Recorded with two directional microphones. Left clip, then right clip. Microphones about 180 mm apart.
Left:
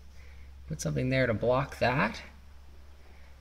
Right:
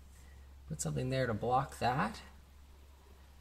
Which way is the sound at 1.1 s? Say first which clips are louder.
Left 6 dB; centre (ahead or behind).